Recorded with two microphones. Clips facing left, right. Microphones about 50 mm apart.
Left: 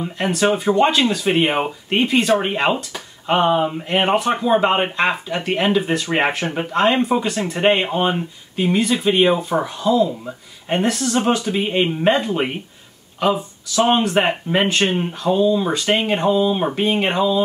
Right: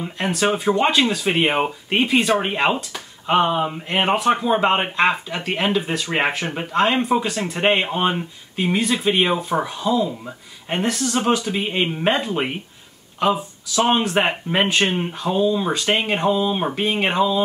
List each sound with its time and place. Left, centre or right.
0.0 s speech: centre